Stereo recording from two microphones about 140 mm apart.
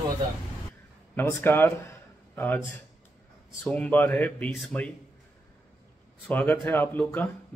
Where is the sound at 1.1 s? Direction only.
15° left (ahead or behind).